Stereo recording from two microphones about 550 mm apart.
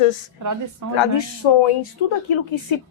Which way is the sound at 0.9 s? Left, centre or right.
Left.